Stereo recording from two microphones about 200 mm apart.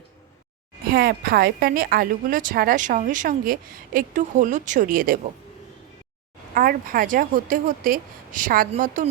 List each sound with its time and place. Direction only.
0.9 s speech: 50° right (ahead or behind)
6.5 s speech: 45° right (ahead or behind)